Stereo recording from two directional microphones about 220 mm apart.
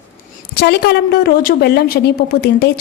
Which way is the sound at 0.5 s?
50° left (ahead or behind).